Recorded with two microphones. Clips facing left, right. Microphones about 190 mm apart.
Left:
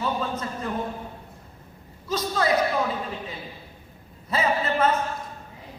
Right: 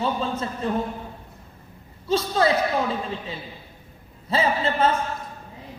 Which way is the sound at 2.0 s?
30° right (ahead or behind).